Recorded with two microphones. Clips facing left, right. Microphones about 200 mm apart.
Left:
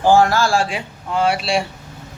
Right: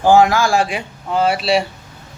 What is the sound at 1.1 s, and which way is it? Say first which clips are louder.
Speech: right 2 dB; centre (ahead or behind).